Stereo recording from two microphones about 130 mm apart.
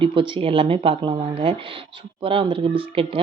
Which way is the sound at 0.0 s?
40° right (ahead or behind).